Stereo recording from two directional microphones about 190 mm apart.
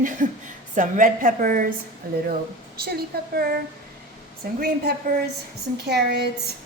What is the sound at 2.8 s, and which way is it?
A woman's voice, 55° right (ahead or behind).